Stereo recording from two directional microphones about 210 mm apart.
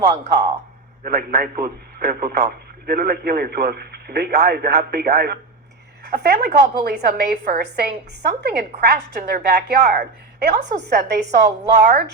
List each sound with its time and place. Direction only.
1.0 s a man's voice: 45° right (ahead or behind)
10.5 s a woman's voice: 35° right (ahead or behind)
10.8 s a man's voice: 50° right (ahead or behind)